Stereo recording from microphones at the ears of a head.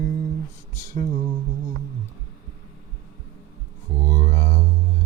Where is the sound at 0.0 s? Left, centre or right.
Right.